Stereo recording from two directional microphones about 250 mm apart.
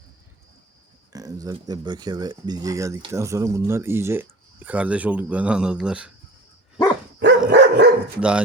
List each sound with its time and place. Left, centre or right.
1.1 s speech: centre
7.2 s dog: right
8.2 s speech: centre